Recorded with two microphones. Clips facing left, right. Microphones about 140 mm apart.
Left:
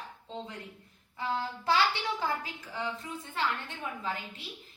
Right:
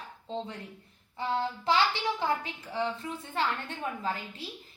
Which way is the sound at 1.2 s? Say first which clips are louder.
Right 3 dB; 25° right (ahead or behind).